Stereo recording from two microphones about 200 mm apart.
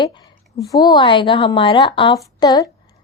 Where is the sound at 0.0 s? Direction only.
20° left (ahead or behind).